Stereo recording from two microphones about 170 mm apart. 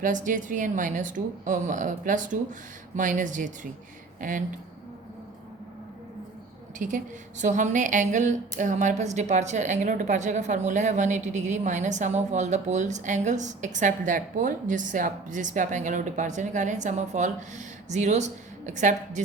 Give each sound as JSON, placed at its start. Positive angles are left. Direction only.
{"t": 0.0, "sound": "a woman's voice", "side_deg": -50}
{"t": 6.7, "sound": "a woman's voice", "side_deg": -45}